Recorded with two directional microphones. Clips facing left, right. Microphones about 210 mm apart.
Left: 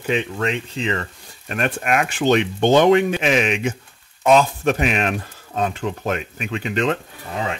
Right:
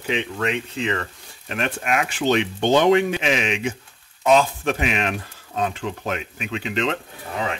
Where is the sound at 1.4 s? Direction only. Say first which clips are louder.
Left 3 dB; 50° left (ahead or behind).